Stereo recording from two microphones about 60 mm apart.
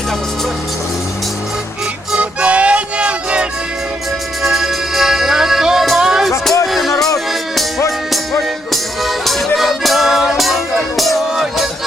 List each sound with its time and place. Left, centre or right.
2.1 s music: right
4.4 s music: centre
8.1 s music: centre